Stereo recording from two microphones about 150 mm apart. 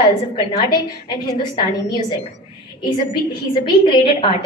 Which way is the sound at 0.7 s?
30° left (ahead or behind).